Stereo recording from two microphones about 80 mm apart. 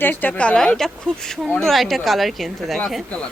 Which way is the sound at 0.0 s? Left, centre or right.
Left.